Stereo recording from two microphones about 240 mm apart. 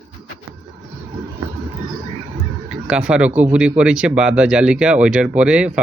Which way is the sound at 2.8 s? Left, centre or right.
Centre.